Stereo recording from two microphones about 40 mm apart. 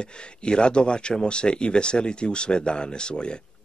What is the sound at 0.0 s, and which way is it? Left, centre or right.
A man's voice, left.